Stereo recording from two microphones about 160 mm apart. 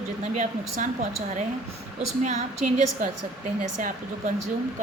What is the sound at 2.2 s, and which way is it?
Speech, 50° right (ahead or behind).